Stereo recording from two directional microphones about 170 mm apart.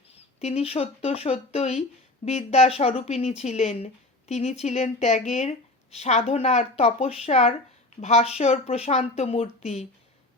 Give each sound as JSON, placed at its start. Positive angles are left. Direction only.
{"t": 0.3, "sound": "speech", "side_deg": 35}